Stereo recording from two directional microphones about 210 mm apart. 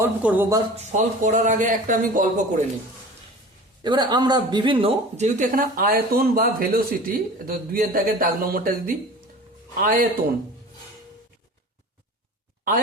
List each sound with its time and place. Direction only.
0.0 s speech: 10° right (ahead or behind)
0.8 s speech: 35° right (ahead or behind)
3.8 s speech: 20° right (ahead or behind); by 10.1 s 40° right (ahead or behind)